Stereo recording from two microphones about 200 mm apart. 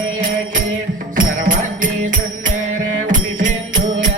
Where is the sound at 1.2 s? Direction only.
40° right (ahead or behind).